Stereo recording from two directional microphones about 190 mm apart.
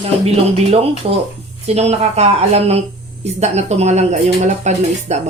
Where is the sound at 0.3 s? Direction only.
30° right (ahead or behind).